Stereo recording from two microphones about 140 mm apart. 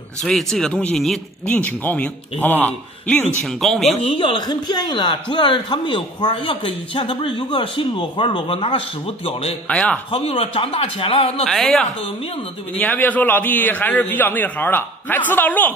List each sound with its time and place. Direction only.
0.2 s a man's voice: centre (ahead or behind)
3.4 s speech: centre (ahead or behind)
4.0 s speech: 40° left (ahead or behind)
9.7 s a man's voice: 10° left (ahead or behind)
10.1 s a man's voice: 45° left (ahead or behind)
11.4 s a man's voice: 5° left (ahead or behind)